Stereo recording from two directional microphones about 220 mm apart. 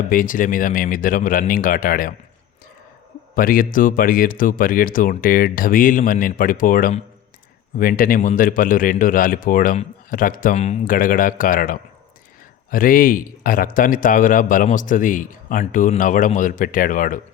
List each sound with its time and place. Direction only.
0.1 s speech: 40° left (ahead or behind)
3.3 s speech: 40° left (ahead or behind)